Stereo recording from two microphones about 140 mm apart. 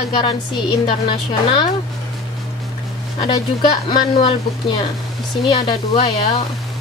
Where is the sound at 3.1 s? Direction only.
35° left (ahead or behind).